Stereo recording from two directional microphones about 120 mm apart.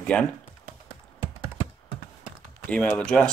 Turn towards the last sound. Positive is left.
turn(degrees=5)  # may be behind; listen again after turning